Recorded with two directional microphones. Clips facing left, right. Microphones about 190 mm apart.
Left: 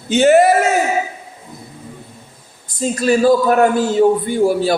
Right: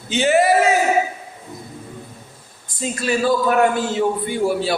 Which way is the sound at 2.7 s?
40° left (ahead or behind).